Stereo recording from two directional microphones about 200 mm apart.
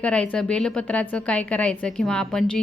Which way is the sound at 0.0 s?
5° left (ahead or behind).